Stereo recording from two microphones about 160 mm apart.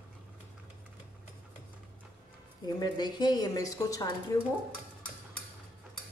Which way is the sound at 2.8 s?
25° left (ahead or behind).